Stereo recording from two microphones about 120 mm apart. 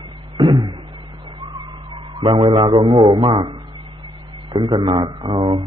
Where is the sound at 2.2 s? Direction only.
40° right (ahead or behind).